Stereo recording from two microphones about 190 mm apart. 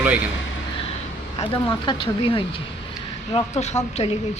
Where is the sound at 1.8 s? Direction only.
25° left (ahead or behind).